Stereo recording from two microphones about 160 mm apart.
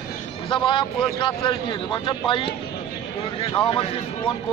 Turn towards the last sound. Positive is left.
turn(degrees=35)  # may be behind; listen again after turning